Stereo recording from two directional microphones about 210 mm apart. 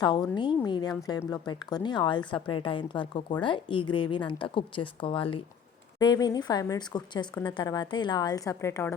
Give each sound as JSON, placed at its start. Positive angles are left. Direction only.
{"t": 0.0, "sound": "a woman's voice", "side_deg": 20}